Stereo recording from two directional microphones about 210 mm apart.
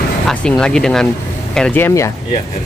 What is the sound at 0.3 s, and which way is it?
Speech, 5° left (ahead or behind).